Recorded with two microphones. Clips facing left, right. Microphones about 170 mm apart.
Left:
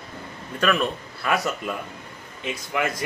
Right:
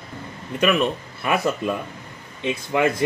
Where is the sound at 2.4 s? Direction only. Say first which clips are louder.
Right 5 dB; 25° right (ahead or behind).